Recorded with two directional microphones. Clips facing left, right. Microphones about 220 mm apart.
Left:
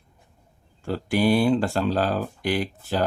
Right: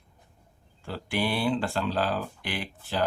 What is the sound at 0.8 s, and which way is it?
Speech, 45° left (ahead or behind).